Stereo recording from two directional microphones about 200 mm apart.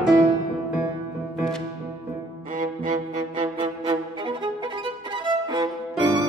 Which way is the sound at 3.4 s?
25° right (ahead or behind).